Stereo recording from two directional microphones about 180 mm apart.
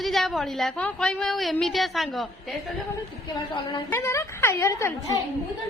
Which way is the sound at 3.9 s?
15° left (ahead or behind).